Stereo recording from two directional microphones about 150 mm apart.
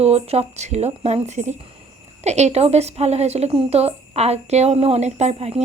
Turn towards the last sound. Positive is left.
turn(degrees=-45)  # may be behind; listen again after turning